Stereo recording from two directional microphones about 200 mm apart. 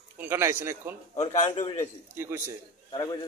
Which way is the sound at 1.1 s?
35° left (ahead or behind).